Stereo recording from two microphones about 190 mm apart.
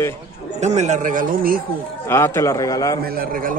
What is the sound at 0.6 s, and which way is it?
A man's voice, 35° right (ahead or behind).